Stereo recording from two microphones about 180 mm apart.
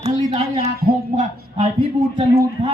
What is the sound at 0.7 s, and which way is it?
Music, 60° right (ahead or behind).